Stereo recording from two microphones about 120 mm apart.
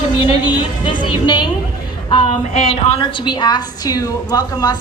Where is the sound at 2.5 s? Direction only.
60° left (ahead or behind).